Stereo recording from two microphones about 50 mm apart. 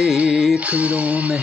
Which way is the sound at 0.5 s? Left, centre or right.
Right.